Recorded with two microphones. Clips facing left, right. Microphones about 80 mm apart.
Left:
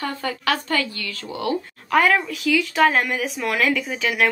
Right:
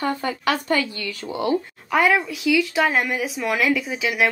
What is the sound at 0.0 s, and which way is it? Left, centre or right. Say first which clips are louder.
A woman's voice: right 2 dB; right.